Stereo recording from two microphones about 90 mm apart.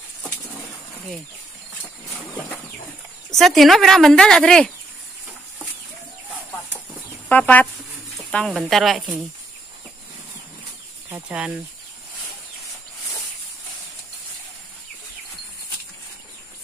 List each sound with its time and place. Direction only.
3.3 s a woman's voice: centre (ahead or behind)
7.2 s speech: 15° left (ahead or behind)
8.5 s a woman's voice: centre (ahead or behind)
11.2 s speech: 15° right (ahead or behind)